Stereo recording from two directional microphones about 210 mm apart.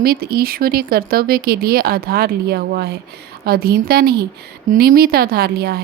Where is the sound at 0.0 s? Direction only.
45° right (ahead or behind).